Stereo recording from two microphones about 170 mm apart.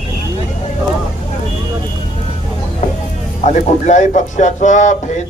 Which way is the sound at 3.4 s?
45° left (ahead or behind).